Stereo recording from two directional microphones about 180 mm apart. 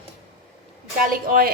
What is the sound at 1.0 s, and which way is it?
Speech, 50° right (ahead or behind).